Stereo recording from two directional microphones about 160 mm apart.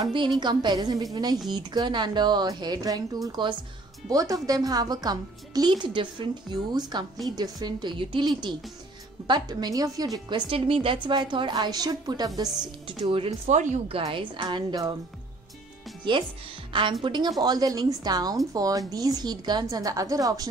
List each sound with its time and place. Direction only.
0.0 s a woman's voice: 30° right (ahead or behind)
13.6 s a woman's voice: 50° right (ahead or behind)
13.9 s a woman's voice: 35° right (ahead or behind)
17.0 s a woman's voice: 30° right (ahead or behind)